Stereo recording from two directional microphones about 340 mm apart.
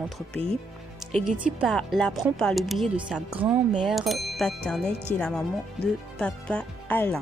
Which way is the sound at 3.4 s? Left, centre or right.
Centre.